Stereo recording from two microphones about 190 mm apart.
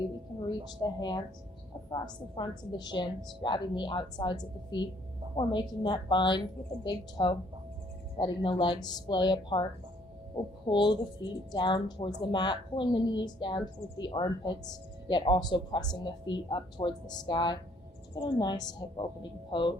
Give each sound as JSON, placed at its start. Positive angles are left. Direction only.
{"t": 0.4, "sound": "speech", "side_deg": 20}
{"t": 10.7, "sound": "speech", "side_deg": 25}